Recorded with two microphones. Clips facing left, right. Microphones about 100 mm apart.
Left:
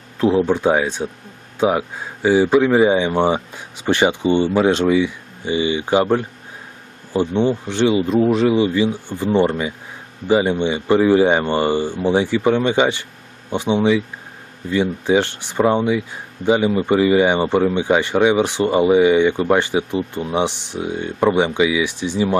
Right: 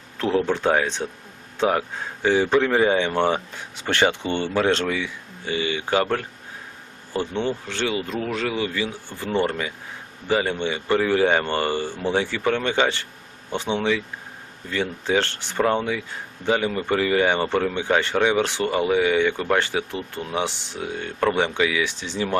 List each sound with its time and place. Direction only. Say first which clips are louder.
0.2 s speech: left 6 dB; 15° left (ahead or behind)